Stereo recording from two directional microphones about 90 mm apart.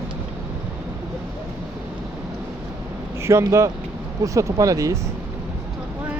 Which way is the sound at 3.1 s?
30° right (ahead or behind).